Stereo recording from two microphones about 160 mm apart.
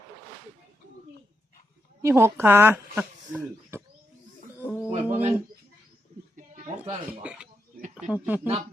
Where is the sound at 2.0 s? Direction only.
15° right (ahead or behind).